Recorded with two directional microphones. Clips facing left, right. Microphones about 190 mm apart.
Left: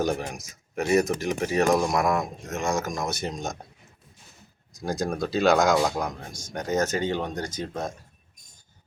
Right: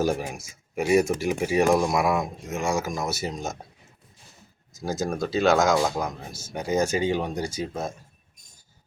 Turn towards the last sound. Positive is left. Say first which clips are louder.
# right 1 dB
turn(degrees=-5)  # may be behind; listen again after turning